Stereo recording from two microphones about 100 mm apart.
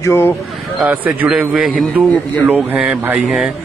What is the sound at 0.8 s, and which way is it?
A man's voice, 15° right (ahead or behind).